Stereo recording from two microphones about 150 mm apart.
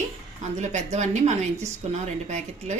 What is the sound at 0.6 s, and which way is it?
Speech, 50° right (ahead or behind).